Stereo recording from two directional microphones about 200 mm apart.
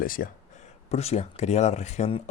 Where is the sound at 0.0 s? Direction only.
45° left (ahead or behind).